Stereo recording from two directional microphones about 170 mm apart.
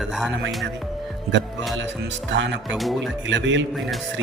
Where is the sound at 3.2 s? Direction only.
90° right.